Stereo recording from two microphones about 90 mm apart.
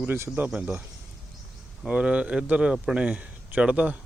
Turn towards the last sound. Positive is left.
turn(degrees=-15)  # may be behind; listen again after turning